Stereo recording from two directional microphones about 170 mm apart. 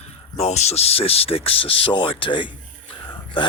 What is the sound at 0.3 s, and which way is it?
Speech, 40° left (ahead or behind).